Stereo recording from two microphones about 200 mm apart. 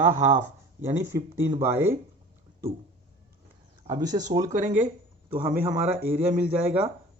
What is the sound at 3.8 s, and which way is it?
Speech, 20° right (ahead or behind).